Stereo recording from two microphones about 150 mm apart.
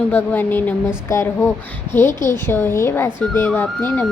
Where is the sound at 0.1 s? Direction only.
15° left (ahead or behind).